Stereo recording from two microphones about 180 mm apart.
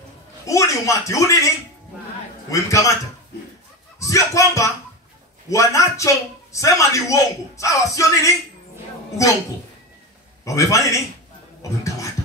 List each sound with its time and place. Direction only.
0.5 s a man's voice: 15° left (ahead or behind)
2.5 s a man's voice: 15° left (ahead or behind)
4.0 s a man's voice: 15° left (ahead or behind)
10.4 s a man's voice: 20° left (ahead or behind)